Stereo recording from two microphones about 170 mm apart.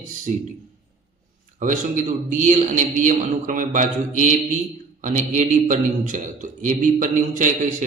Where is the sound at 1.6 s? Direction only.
50° right (ahead or behind).